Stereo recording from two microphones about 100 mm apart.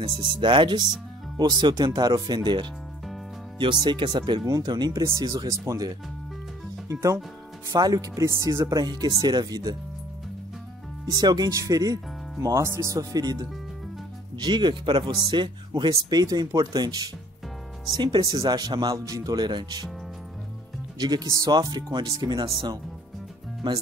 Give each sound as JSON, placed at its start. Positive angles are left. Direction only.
{"t": 0.2, "sound": "speech", "side_deg": -50}
{"t": 4.5, "sound": "speech", "side_deg": -40}
{"t": 11.1, "sound": "speech", "side_deg": -40}
{"t": 15.9, "sound": "speech", "side_deg": -40}
{"t": 21.0, "sound": "speech", "side_deg": -45}